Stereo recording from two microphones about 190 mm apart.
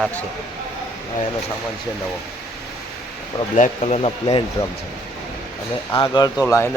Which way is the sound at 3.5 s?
35° left (ahead or behind).